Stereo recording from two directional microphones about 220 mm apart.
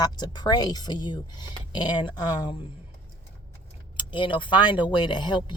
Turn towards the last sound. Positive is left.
turn(degrees=20)  # may be behind; listen again after turning